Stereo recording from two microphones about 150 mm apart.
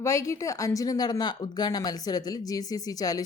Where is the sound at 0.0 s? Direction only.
20° left (ahead or behind).